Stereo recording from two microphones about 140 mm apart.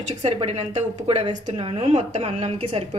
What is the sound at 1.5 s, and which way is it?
A woman's voice, 40° right (ahead or behind).